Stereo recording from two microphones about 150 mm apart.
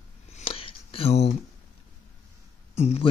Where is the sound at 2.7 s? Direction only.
45° left (ahead or behind).